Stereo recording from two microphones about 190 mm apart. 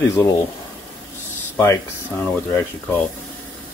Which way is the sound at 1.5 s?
15° left (ahead or behind).